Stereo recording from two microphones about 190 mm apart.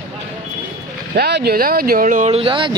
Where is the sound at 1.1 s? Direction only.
55° right (ahead or behind); by 2.8 s 25° right (ahead or behind).